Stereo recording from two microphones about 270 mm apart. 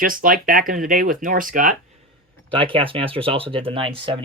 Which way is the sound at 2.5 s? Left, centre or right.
Centre.